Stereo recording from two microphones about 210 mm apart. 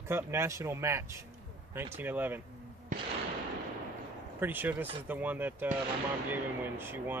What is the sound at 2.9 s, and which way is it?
Fireworks, 35° right (ahead or behind).